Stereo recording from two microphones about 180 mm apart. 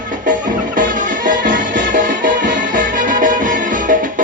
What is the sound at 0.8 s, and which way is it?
Music, 45° right (ahead or behind).